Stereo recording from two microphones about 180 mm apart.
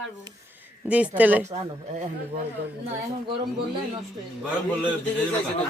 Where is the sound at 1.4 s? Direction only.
40° right (ahead or behind).